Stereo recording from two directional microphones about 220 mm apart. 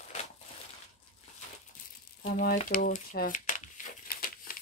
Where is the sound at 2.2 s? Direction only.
35° left (ahead or behind).